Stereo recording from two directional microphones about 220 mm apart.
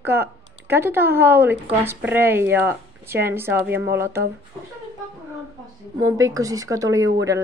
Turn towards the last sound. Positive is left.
turn(degrees=-15)  # may be behind; listen again after turning